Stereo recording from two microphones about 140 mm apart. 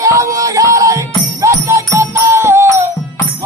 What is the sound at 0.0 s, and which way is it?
Music, 20° right (ahead or behind).